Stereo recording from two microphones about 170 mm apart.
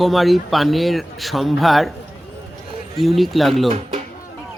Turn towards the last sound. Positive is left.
turn(degrees=-30)  # may be behind; listen again after turning